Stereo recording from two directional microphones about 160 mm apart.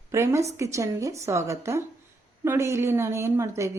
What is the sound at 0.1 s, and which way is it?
A woman's voice, 20° right (ahead or behind).